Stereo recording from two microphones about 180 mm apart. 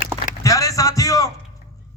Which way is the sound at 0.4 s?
20° left (ahead or behind).